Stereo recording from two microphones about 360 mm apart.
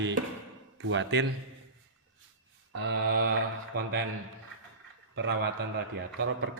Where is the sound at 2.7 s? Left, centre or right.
Right.